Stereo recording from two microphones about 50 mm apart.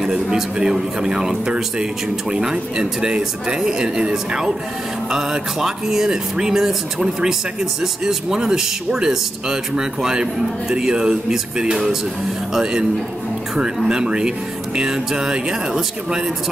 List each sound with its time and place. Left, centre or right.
0.0 s speech: centre
13.8 s speech: centre